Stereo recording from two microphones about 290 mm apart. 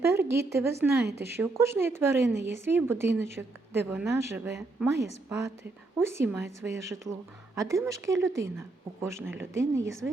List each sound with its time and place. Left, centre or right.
0.2 s a woman's voice: centre
9.8 s a woman's voice: right